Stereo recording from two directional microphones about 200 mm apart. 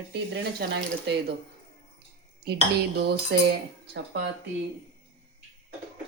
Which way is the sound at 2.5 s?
50° right (ahead or behind).